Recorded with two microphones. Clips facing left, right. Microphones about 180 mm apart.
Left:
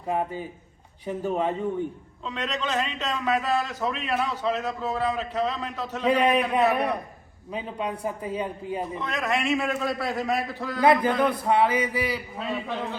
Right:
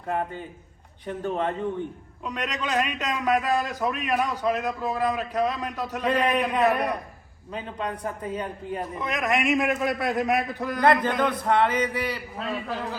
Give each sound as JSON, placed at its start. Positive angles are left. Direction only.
{"t": 0.1, "sound": "a man's voice", "side_deg": 5}
{"t": 2.2, "sound": "a man's voice", "side_deg": -15}
{"t": 6.1, "sound": "a man's voice", "side_deg": 10}
{"t": 9.0, "sound": "a man's voice", "side_deg": -15}
{"t": 10.8, "sound": "a man's voice", "side_deg": 5}